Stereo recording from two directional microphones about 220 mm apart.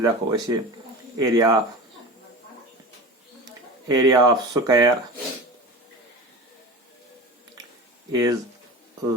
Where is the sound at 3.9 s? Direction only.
15° right (ahead or behind).